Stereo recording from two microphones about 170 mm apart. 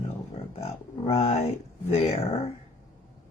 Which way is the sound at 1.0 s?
35° left (ahead or behind).